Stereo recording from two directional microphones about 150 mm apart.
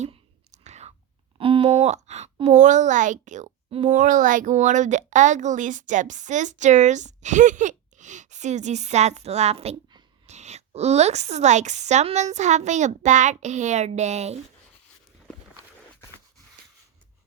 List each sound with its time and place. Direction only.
0.0 s whispering: 50° right (ahead or behind)
1.4 s speech: 35° right (ahead or behind)
1.9 s a woman's voice: 50° right (ahead or behind)